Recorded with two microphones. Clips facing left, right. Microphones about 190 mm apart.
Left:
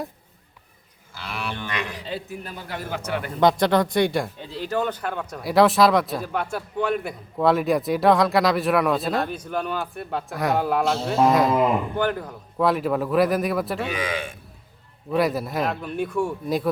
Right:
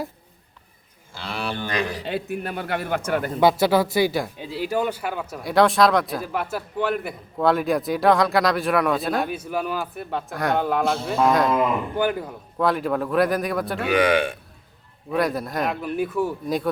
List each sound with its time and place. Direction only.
1.1 s livestock: 30° right (ahead or behind)
2.0 s a man's voice: 65° right (ahead or behind); by 3.3 s 45° right (ahead or behind)
3.4 s speech: 5° right (ahead or behind)
11.9 s a man's voice: 10° right (ahead or behind)
12.5 s speech: centre (ahead or behind)
13.8 s speech: 65° right (ahead or behind)
15.1 s speech: centre (ahead or behind)